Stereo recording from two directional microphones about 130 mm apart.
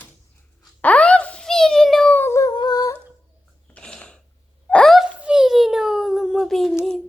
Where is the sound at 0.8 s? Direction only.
10° left (ahead or behind).